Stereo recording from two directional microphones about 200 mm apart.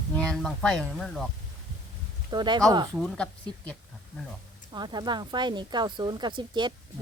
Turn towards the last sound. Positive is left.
turn(degrees=-25)  # may be behind; listen again after turning